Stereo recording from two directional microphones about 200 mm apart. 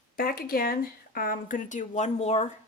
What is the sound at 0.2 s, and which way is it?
Speech, 50° left (ahead or behind).